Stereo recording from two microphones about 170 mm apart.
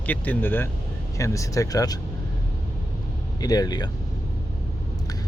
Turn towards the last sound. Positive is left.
turn(degrees=25)  # may be behind; listen again after turning